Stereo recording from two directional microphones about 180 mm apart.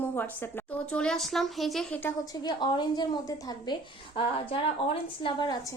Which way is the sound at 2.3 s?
25° left (ahead or behind).